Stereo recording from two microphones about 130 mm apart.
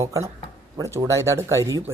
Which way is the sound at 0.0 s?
25° right (ahead or behind).